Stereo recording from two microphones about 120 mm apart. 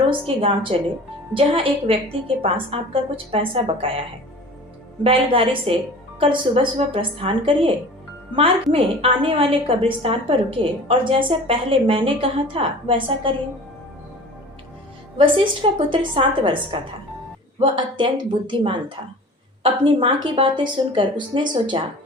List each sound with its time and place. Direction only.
0.3 s a woman's voice: 50° right (ahead or behind)
5.0 s a woman's voice: 50° right (ahead or behind)
15.2 s a woman's voice: 45° right (ahead or behind)
17.6 s a woman's voice: 40° right (ahead or behind)